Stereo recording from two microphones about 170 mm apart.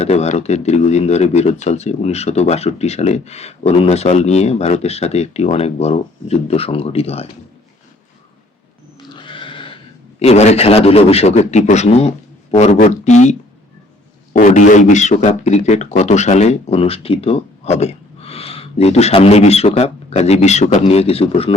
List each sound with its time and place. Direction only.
0.0 s speech: 40° left (ahead or behind)
9.0 s a sound: 30° left (ahead or behind)
10.2 s speech: 40° left (ahead or behind)
14.3 s speech: 45° left (ahead or behind)